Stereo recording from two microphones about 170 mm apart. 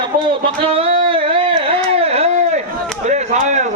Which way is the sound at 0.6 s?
35° right (ahead or behind).